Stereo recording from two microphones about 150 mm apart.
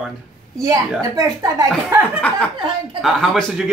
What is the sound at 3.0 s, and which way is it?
Speech, centre (ahead or behind).